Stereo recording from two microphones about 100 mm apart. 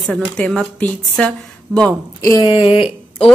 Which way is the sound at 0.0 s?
5° left (ahead or behind).